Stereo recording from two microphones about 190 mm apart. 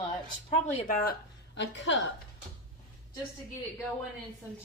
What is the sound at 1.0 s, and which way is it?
Speech, 60° left (ahead or behind).